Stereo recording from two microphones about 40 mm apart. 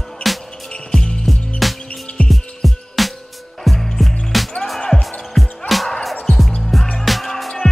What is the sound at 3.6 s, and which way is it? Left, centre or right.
Music, centre.